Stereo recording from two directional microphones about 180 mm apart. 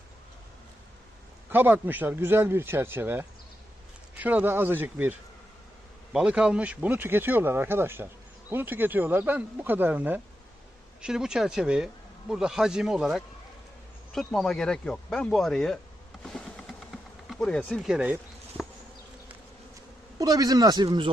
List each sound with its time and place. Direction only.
1.5 s speech: 10° right (ahead or behind)
6.1 s speech: 5° right (ahead or behind)
14.3 s speech: centre (ahead or behind)
16.2 s insect: 5° left (ahead or behind)
20.1 s a man's voice: 20° right (ahead or behind)